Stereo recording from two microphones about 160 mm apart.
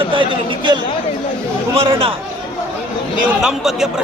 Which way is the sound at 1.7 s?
35° right (ahead or behind).